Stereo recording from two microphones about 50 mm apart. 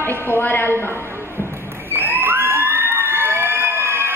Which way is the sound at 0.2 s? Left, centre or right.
Left.